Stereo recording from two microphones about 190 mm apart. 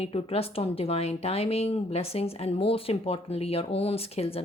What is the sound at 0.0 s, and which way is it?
Speech, 30° left (ahead or behind).